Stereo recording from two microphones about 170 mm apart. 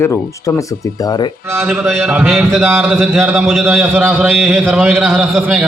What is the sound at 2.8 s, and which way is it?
Speech, centre (ahead or behind).